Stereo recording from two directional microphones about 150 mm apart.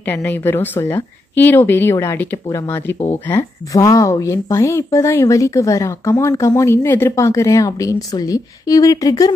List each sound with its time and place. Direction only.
0.0 s a woman's voice: 15° left (ahead or behind)